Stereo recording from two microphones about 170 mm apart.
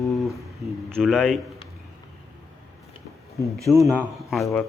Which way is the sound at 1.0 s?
Centre (ahead or behind).